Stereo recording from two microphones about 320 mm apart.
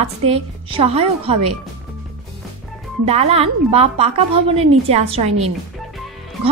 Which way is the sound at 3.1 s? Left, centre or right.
Centre.